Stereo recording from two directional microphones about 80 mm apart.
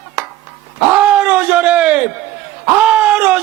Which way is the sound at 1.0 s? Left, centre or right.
Centre.